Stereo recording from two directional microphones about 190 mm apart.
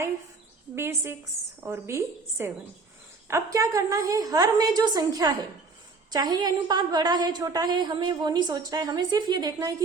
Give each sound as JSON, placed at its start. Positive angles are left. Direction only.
{"t": 0.8, "sound": "a woman's voice", "side_deg": -15}